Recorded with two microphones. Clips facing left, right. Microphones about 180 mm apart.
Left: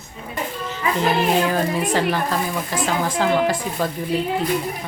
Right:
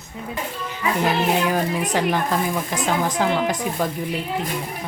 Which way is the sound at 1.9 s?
15° right (ahead or behind).